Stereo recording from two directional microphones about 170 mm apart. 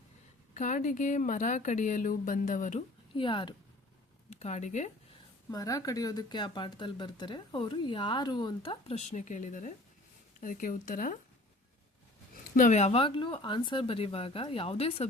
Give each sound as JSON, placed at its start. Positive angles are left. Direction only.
{"t": 0.5, "sound": "speech", "side_deg": 45}
{"t": 3.2, "sound": "speech", "side_deg": 30}
{"t": 4.3, "sound": "speech", "side_deg": 40}
{"t": 5.5, "sound": "speech", "side_deg": 20}
{"t": 12.5, "sound": "speech", "side_deg": 45}